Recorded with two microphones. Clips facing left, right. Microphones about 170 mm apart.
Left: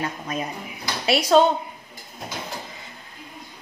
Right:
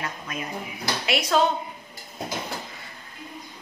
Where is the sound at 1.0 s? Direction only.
30° left (ahead or behind).